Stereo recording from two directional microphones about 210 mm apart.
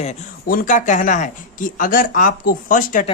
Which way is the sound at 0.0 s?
35° left (ahead or behind).